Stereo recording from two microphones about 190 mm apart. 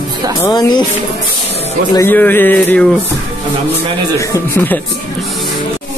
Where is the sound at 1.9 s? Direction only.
10° left (ahead or behind).